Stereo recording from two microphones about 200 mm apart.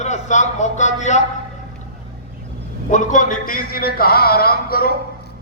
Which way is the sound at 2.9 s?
40° left (ahead or behind).